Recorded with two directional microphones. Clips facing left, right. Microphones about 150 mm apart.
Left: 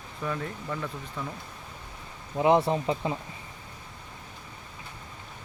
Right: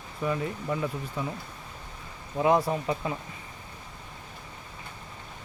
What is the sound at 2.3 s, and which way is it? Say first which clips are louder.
Speech: left 1 dB; 20° left (ahead or behind).